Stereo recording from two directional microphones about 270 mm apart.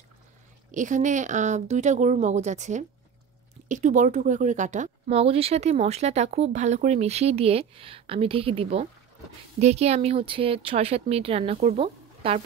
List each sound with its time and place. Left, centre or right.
0.7 s speech: right